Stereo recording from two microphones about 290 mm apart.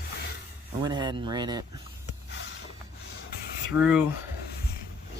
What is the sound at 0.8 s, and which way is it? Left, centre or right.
Speech, centre.